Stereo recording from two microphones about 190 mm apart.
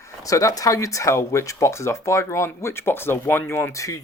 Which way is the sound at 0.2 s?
15° left (ahead or behind).